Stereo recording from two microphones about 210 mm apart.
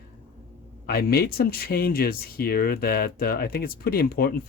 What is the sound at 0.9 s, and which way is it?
Speech, 45° left (ahead or behind).